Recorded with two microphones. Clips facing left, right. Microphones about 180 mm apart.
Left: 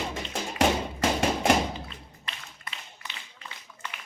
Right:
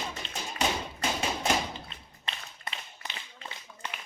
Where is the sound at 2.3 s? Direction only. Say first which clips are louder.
Right 2 dB; 25° right (ahead or behind).